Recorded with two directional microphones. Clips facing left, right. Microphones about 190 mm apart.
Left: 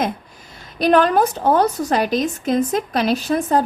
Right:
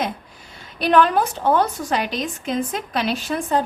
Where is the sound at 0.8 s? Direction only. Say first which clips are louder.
Left 2 dB; 40° left (ahead or behind).